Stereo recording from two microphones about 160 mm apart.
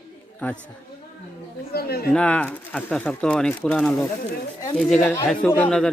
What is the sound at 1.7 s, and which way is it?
Speech, 75° left (ahead or behind).